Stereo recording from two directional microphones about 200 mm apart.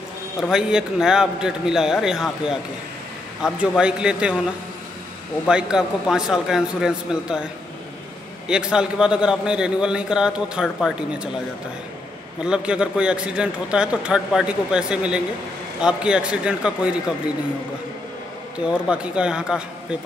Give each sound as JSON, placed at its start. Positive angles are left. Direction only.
{"t": 0.4, "sound": "a man's voice", "side_deg": -5}
{"t": 5.5, "sound": "a man's voice", "side_deg": -5}
{"t": 8.5, "sound": "a man's voice", "side_deg": -5}
{"t": 12.4, "sound": "a man's voice", "side_deg": -5}
{"t": 18.7, "sound": "a man's voice", "side_deg": -5}